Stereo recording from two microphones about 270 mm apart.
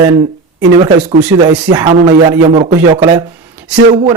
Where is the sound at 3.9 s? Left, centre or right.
Right.